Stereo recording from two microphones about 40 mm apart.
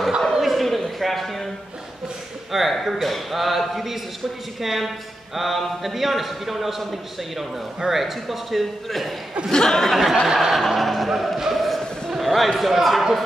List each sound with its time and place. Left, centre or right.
0.3 s a sound: centre
2.5 s a man's voice: centre
7.9 s a man's voice: centre
9.5 s speech: centre
9.8 s a man's voice: centre